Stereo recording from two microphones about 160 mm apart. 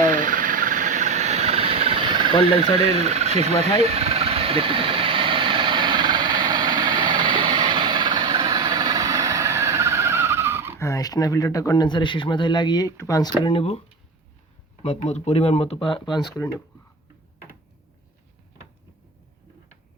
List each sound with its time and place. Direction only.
0.0 s cricket: 55° right (ahead or behind); by 2.6 s 35° right (ahead or behind)
2.7 s a sound: 40° right (ahead or behind); by 10.8 s 15° right (ahead or behind)
10.8 s speech: 20° left (ahead or behind)
13.4 s speech: 35° left (ahead or behind)
14.8 s speech: 45° left (ahead or behind)